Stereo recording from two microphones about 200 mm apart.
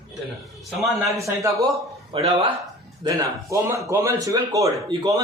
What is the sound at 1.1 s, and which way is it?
Speech, 15° right (ahead or behind).